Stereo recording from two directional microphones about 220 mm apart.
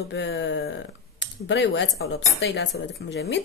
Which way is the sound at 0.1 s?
55° left (ahead or behind).